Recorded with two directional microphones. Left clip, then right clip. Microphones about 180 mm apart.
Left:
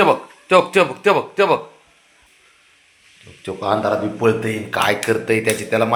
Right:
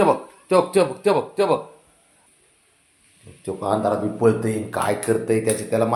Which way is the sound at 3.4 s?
10° right (ahead or behind).